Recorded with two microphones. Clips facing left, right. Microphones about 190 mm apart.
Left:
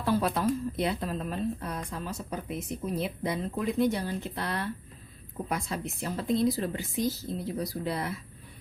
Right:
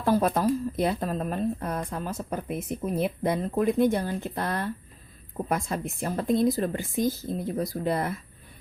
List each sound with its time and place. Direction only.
0.0 s a woman's voice: 45° right (ahead or behind)